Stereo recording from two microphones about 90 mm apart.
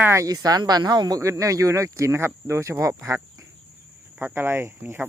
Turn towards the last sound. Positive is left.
turn(degrees=-25)  # may be behind; listen again after turning